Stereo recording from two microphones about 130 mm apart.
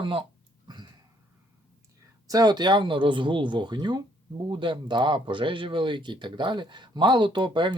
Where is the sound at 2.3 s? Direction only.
30° right (ahead or behind).